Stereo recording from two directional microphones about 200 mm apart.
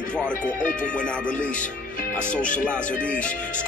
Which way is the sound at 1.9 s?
40° left (ahead or behind).